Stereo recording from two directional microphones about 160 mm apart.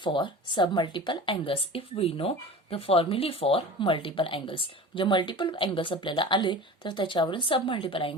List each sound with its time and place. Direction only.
0.0 s a woman's voice: 30° left (ahead or behind)